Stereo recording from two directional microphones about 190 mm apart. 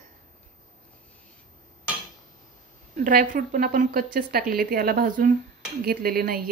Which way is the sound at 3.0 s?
45° right (ahead or behind).